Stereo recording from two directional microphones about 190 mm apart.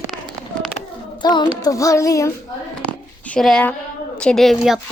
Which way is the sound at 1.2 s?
25° left (ahead or behind).